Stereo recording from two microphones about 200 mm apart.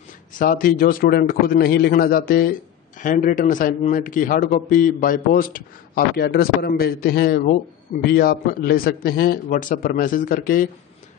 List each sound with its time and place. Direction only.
0.4 s a man's voice: 45° left (ahead or behind)